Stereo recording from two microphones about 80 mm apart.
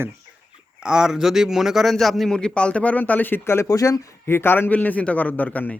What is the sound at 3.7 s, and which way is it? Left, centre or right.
Speech, left.